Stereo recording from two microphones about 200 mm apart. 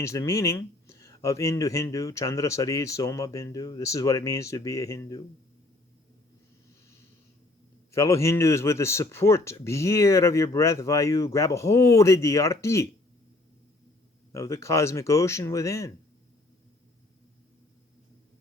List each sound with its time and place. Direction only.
0.0 s speech: 15° left (ahead or behind)
7.9 s speech: 15° left (ahead or behind)
14.3 s speech: 15° left (ahead or behind)